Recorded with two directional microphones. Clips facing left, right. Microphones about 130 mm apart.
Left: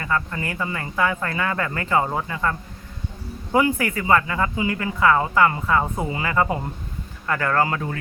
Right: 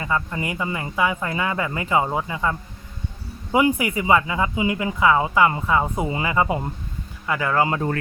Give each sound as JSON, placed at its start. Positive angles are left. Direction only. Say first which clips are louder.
{"t": 0.0, "sound": "speech", "louder": "even", "side_deg": -15}
{"t": 6.1, "sound": "speech", "louder": "right 1 dB", "side_deg": -25}
{"t": 6.3, "sound": "speech", "louder": "left 2 dB", "side_deg": -15}